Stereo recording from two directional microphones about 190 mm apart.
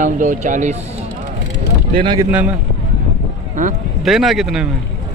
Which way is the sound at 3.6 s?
45° right (ahead or behind).